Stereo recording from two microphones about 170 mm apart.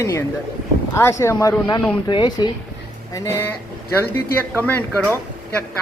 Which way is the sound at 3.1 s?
15° left (ahead or behind).